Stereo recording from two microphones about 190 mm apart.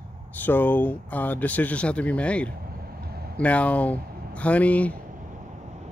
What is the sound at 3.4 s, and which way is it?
Speech, 5° left (ahead or behind).